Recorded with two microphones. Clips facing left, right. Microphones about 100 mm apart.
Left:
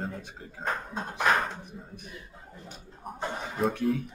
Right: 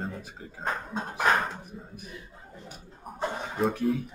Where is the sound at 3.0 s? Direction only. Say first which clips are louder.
Right 2 dB; centre (ahead or behind).